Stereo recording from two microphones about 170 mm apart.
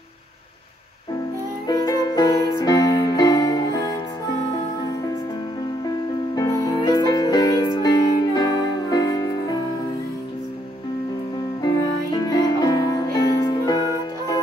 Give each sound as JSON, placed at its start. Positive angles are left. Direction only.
{"t": 1.7, "sound": "music", "side_deg": 25}
{"t": 5.9, "sound": "music", "side_deg": 20}
{"t": 11.6, "sound": "music", "side_deg": 25}